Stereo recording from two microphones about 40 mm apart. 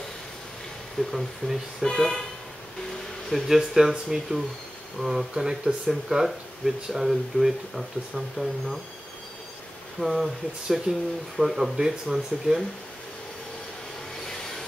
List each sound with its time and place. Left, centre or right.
1.0 s speech: left
1.8 s speech: centre
3.4 s speech: centre
5.9 s speech: centre
9.9 s speech: centre